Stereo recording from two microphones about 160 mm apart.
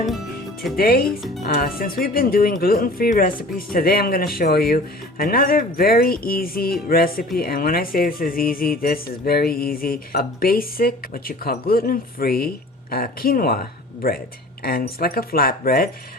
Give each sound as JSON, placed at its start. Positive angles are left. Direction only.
{"t": 0.8, "sound": "speech", "side_deg": 70}